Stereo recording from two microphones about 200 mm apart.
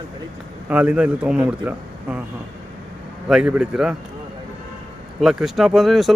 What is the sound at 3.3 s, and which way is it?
Speech, 5° right (ahead or behind).